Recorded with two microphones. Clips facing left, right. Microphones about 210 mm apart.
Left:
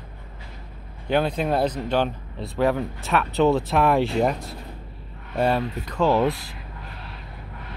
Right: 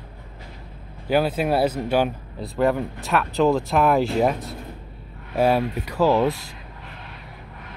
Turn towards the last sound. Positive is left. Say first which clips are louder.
# right 1 dB
turn(degrees=0)  # may be behind; listen again after turning